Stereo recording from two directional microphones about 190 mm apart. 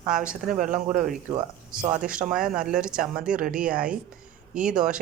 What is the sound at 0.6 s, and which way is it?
Speech, 45° right (ahead or behind).